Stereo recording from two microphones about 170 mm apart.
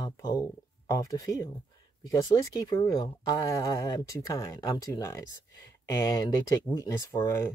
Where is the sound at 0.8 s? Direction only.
20° left (ahead or behind).